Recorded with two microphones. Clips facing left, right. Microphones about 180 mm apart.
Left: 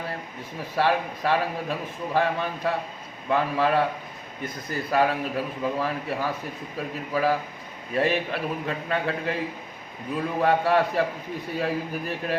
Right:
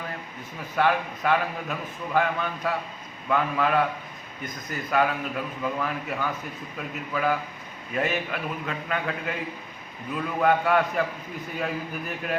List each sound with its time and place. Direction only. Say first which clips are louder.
0.8 s a man's voice: even; 30° left (ahead or behind)